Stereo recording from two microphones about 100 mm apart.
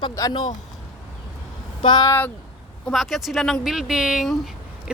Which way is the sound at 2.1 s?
20° left (ahead or behind).